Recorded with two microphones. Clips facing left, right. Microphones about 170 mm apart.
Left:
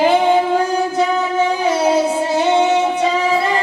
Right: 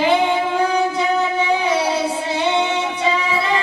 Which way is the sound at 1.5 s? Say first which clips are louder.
Left 4 dB; 45° left (ahead or behind).